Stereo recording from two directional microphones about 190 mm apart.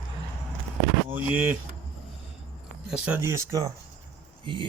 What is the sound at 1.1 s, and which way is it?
Speech, 5° right (ahead or behind).